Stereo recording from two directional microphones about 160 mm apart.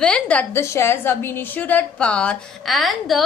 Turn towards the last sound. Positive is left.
turn(degrees=0)  # may be behind; listen again after turning